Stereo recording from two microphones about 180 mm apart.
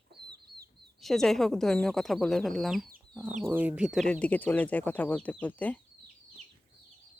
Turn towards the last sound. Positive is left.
turn(degrees=10)  # may be behind; listen again after turning